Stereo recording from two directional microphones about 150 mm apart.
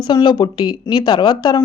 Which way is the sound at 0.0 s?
30° left (ahead or behind).